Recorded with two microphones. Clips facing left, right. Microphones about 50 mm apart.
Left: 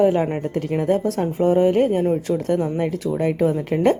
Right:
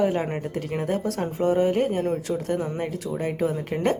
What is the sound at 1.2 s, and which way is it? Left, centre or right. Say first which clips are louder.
Speech: left 3 dB; left.